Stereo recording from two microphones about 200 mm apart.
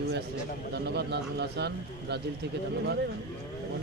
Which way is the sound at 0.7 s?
55° right (ahead or behind).